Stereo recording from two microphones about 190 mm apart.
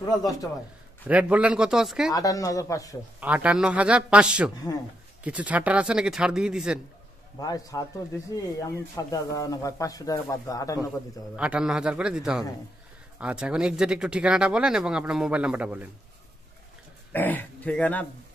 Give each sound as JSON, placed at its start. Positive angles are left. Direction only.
{"t": 0.0, "sound": "a man's voice", "side_deg": 20}
{"t": 1.0, "sound": "speech", "side_deg": -5}
{"t": 2.1, "sound": "speech", "side_deg": 20}
{"t": 3.2, "sound": "speech", "side_deg": -10}
{"t": 7.3, "sound": "a man's voice", "side_deg": 20}
{"t": 11.3, "sound": "speech", "side_deg": -5}
{"t": 17.1, "sound": "speech", "side_deg": 10}